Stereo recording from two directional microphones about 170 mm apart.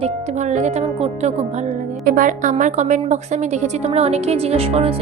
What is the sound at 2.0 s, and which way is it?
A woman's voice, 55° right (ahead or behind).